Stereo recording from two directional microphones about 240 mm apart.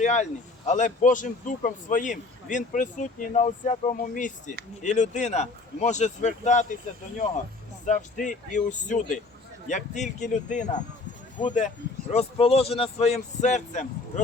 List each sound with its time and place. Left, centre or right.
0.0 s a man's voice: left
7.9 s a man's voice: left